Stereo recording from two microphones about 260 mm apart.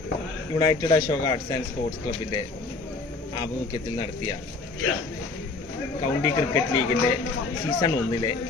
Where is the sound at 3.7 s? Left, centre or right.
Centre.